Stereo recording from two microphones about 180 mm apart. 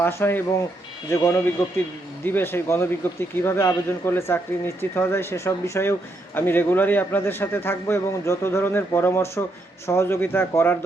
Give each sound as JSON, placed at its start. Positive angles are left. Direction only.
{"t": 0.0, "sound": "speech", "side_deg": 15}